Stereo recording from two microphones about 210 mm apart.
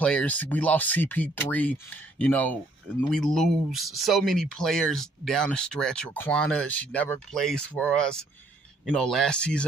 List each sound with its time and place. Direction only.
0.0 s speech: 5° left (ahead or behind)